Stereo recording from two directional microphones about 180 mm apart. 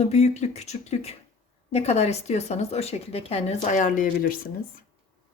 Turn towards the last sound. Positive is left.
turn(degrees=50)  # may be behind; listen again after turning